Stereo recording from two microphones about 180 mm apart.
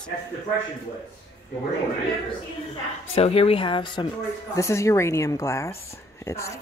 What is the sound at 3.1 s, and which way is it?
Speech, 35° left (ahead or behind).